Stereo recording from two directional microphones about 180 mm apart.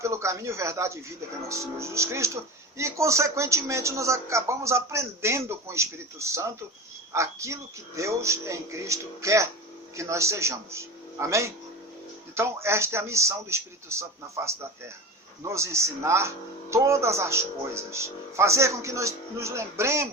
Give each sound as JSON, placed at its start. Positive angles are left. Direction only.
{"t": 0.0, "sound": "speech", "side_deg": -15}